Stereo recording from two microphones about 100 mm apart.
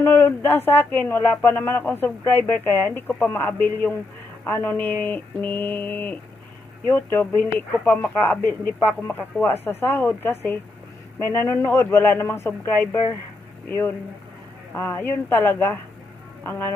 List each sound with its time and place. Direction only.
0.0 s speech: 20° left (ahead or behind)